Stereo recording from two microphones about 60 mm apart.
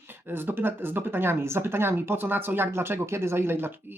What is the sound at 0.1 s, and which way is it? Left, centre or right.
Speech, right.